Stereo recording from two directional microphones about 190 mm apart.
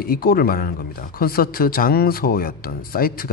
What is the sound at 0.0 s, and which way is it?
Speech, 50° left (ahead or behind).